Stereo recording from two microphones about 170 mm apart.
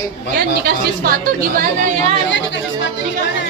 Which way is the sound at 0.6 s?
60° right (ahead or behind).